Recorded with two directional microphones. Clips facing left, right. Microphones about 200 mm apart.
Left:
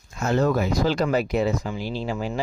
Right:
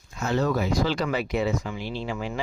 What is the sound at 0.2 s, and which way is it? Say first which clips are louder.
A man's voice: left 3 dB; 45° left (ahead or behind).